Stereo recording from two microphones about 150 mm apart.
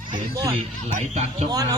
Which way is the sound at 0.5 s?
50° right (ahead or behind).